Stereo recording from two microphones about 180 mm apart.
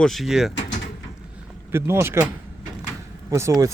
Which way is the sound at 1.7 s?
15° right (ahead or behind).